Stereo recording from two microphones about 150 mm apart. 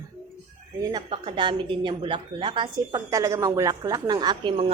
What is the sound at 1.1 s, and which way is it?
A woman's voice, 40° right (ahead or behind).